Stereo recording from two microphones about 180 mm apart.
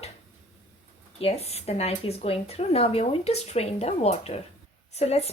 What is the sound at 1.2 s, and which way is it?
Speech, 35° left (ahead or behind).